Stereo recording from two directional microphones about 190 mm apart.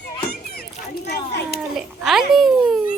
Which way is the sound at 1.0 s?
60° left (ahead or behind).